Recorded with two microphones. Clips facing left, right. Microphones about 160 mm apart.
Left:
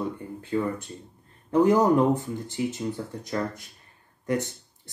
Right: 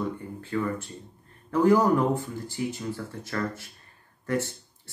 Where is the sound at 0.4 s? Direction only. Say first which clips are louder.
Left 2 dB; 20° left (ahead or behind).